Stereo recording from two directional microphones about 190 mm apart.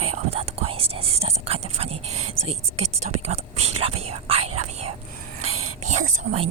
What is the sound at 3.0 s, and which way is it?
Speech, 35° right (ahead or behind).